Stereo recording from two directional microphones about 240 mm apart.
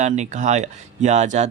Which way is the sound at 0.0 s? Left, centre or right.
Right.